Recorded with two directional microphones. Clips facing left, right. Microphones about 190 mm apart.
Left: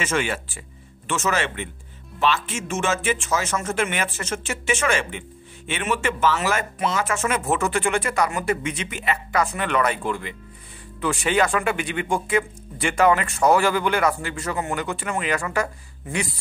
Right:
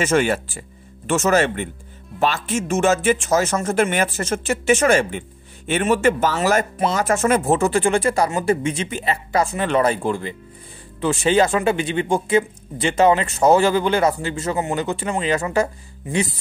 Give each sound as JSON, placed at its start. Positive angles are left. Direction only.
{"t": 0.0, "sound": "speech", "side_deg": -40}